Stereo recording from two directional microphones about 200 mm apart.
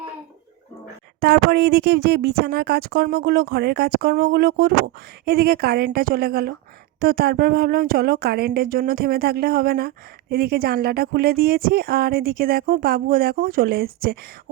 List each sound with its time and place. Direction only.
1.2 s speech: 55° right (ahead or behind)